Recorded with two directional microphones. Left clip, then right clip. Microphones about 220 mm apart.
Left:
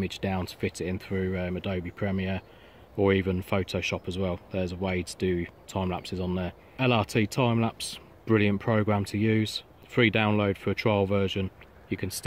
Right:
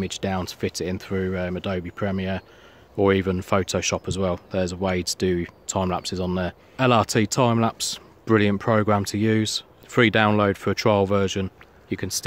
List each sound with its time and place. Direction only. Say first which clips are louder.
0.0 s speech: right 5 dB; 10° right (ahead or behind)